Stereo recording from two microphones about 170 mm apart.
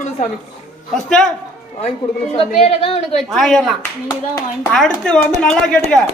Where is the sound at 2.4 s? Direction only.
35° left (ahead or behind).